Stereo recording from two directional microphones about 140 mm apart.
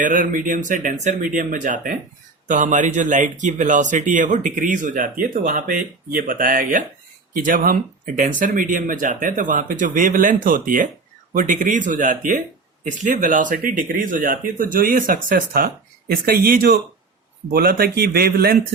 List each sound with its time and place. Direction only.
0.0 s speech: 75° right (ahead or behind)
2.5 s a man's voice: 65° right (ahead or behind); by 18.6 s 90° right